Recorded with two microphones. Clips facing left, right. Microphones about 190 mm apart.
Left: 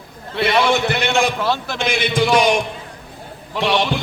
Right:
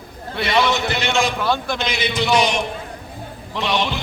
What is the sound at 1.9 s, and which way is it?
Speech, 50° left (ahead or behind).